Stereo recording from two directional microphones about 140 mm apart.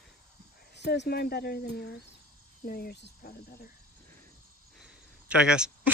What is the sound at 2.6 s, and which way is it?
Speech, 90° left.